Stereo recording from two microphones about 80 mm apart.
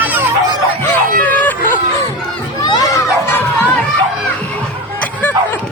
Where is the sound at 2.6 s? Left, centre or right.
Left.